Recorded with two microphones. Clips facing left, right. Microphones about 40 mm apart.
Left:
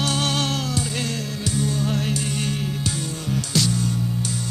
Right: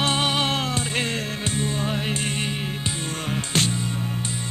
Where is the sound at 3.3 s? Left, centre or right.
Right.